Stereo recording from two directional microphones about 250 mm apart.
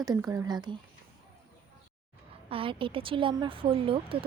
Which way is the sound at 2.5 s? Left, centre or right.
Right.